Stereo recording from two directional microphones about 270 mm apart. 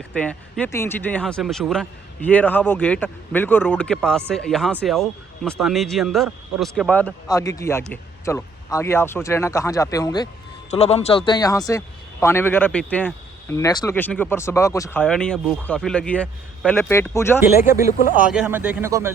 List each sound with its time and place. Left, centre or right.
0.1 s a man's voice: centre
17.7 s speech: centre